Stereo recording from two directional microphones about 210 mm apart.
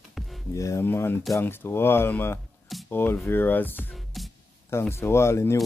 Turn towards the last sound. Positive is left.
turn(degrees=15)  # may be behind; listen again after turning